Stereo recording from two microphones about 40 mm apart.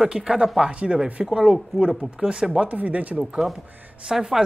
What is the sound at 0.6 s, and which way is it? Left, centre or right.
Speech, right.